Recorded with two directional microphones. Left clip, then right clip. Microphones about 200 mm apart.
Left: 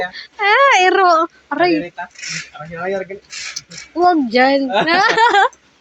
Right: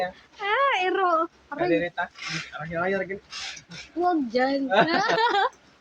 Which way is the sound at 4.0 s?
45° left (ahead or behind).